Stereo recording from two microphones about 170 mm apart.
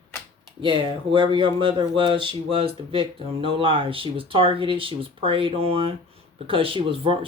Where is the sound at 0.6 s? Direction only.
30° right (ahead or behind).